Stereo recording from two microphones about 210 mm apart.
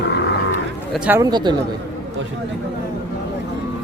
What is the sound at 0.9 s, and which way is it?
Speech, 5° right (ahead or behind).